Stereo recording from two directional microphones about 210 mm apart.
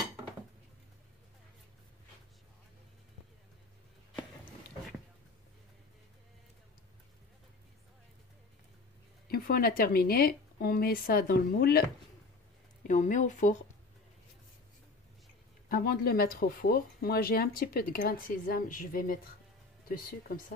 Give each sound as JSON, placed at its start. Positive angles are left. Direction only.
{"t": 9.3, "sound": "speech", "side_deg": 45}
{"t": 12.8, "sound": "speech", "side_deg": 35}
{"t": 15.7, "sound": "speech", "side_deg": 45}